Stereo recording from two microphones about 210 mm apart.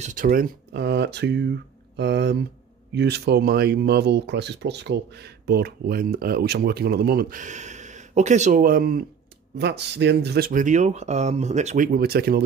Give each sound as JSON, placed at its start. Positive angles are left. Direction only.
{"t": 0.0, "sound": "speech", "side_deg": -40}